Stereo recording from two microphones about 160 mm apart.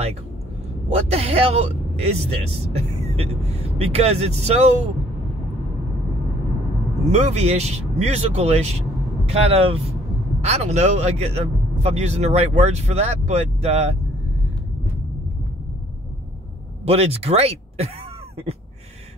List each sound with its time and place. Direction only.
0.8 s speech: 40° right (ahead or behind)
7.1 s a man's voice: 45° right (ahead or behind)
16.8 s speech: 40° right (ahead or behind)